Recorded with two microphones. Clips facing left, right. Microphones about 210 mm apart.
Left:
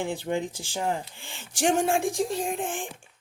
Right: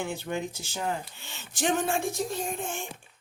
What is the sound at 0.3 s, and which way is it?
Speech, 15° left (ahead or behind).